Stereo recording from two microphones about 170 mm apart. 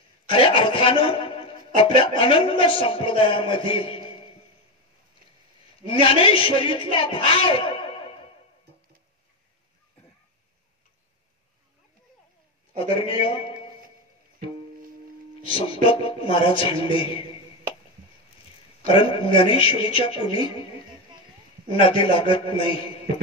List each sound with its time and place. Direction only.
0.3 s music: 30° left (ahead or behind)
2.0 s a man's voice: 30° left (ahead or behind)
5.9 s a man's voice: 30° left (ahead or behind)
12.7 s a man's voice: 35° left (ahead or behind)
15.4 s a man's voice: 30° left (ahead or behind)
18.9 s a man's voice: 30° left (ahead or behind)
21.6 s a man's voice: 30° left (ahead or behind)